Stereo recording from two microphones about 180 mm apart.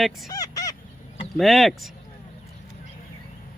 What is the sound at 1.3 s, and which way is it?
Speech, centre (ahead or behind).